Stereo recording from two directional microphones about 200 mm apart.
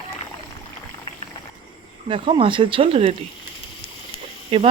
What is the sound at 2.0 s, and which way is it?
Speech, 25° right (ahead or behind).